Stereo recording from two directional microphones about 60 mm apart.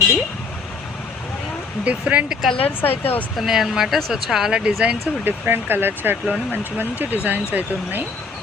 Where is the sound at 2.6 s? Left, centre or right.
Left.